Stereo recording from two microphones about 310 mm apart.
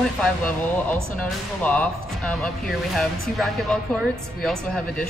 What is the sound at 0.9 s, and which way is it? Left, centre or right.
Speech, centre.